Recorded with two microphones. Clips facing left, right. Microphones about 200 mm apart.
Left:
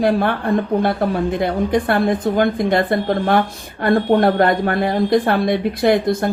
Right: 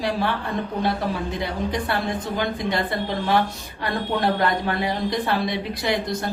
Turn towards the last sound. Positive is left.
turn(degrees=55)  # may be behind; listen again after turning